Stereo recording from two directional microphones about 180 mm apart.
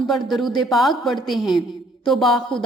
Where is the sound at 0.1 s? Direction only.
Centre (ahead or behind).